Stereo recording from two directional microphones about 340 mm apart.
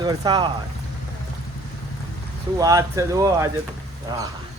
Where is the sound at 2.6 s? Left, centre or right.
Centre.